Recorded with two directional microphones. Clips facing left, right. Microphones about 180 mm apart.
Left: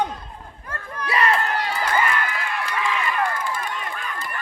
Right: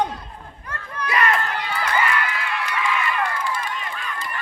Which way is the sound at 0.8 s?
30° left (ahead or behind).